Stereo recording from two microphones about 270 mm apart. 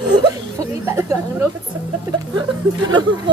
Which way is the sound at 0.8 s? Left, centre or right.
Centre.